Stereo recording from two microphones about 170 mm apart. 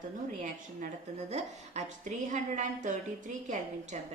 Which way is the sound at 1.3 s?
40° right (ahead or behind).